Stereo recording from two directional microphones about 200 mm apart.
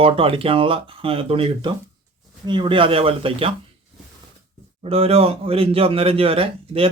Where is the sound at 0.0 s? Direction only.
30° right (ahead or behind).